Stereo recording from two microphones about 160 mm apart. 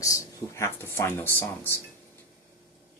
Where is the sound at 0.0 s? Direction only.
20° left (ahead or behind).